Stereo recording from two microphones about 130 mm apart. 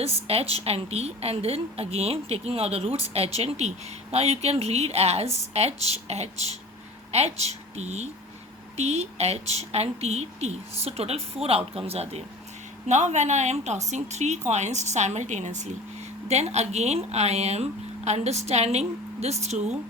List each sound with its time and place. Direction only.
0.0 s a woman's voice: 50° right (ahead or behind)